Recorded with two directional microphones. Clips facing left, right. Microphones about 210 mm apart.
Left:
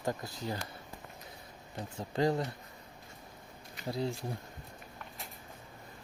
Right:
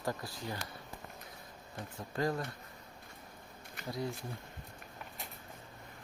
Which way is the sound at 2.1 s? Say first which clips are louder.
Left 4 dB; 25° left (ahead or behind).